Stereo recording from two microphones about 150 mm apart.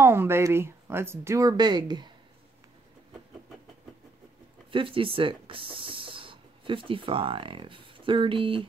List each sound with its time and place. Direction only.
0.0 s speech: 15° right (ahead or behind)
4.6 s speech: 35° right (ahead or behind)